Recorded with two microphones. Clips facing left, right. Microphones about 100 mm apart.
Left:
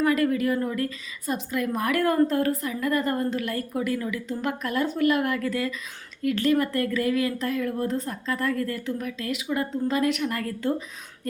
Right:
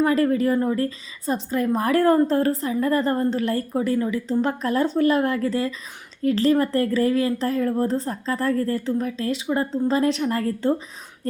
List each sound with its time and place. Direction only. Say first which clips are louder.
0.0 s a woman's voice: right 3 dB; 30° right (ahead or behind)